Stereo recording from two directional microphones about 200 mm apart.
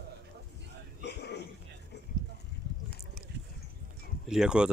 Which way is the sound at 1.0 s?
55° left (ahead or behind).